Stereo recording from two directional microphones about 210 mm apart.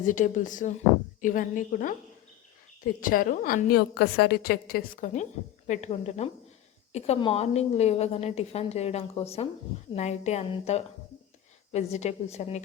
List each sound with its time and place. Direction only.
0.0 s a woman's voice: 40° left (ahead or behind)
3.0 s a woman's voice: 40° left (ahead or behind)